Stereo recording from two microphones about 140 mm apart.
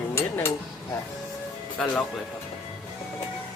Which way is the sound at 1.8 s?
Centre (ahead or behind).